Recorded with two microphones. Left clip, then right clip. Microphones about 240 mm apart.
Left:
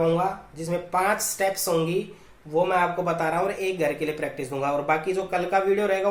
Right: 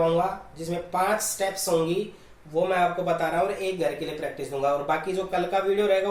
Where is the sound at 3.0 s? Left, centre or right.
Left.